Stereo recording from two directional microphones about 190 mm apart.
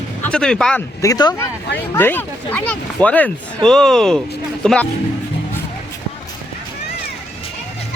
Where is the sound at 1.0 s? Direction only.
20° left (ahead or behind); by 4.8 s 5° left (ahead or behind).